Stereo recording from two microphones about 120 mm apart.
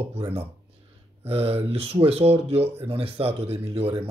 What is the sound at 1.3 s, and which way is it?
Speech, 55° right (ahead or behind).